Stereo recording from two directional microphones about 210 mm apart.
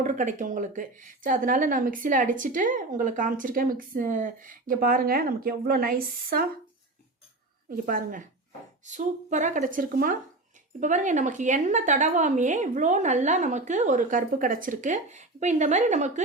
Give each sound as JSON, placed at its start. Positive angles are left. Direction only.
{"t": 0.0, "sound": "speech", "side_deg": -35}
{"t": 7.9, "sound": "speech", "side_deg": -40}